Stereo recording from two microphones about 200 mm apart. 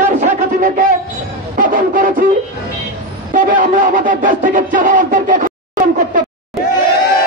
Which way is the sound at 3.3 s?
40° right (ahead or behind).